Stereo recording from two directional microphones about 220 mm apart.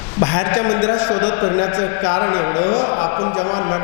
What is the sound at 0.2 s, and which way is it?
A man's voice, 15° left (ahead or behind).